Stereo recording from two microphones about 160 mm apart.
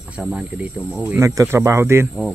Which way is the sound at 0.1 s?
5° right (ahead or behind).